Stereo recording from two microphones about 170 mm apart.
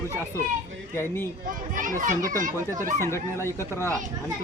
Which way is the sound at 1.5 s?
50° right (ahead or behind).